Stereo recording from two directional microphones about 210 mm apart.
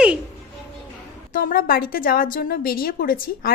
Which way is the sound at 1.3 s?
45° left (ahead or behind).